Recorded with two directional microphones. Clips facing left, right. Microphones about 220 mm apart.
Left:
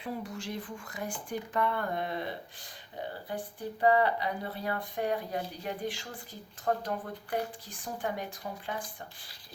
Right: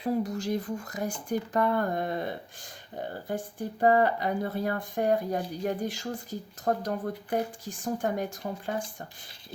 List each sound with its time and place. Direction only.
0.0 s speech: 40° right (ahead or behind)